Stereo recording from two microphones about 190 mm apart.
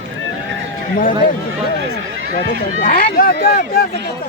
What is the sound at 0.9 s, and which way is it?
Speech, 45° left (ahead or behind).